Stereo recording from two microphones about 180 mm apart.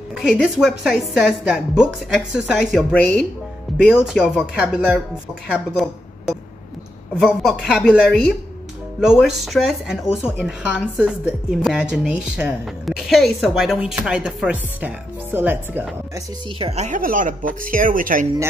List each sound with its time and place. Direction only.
0.1 s speech: centre (ahead or behind)
16.5 s speech: 35° right (ahead or behind)